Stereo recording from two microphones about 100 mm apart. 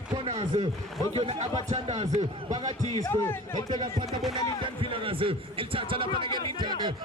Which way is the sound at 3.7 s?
55° right (ahead or behind).